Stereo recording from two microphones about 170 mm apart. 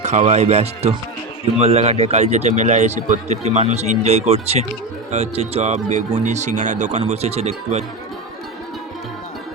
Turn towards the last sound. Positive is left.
turn(degrees=-40)  # may be behind; listen again after turning